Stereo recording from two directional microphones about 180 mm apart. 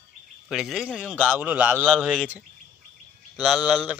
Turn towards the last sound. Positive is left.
turn(degrees=20)  # may be behind; listen again after turning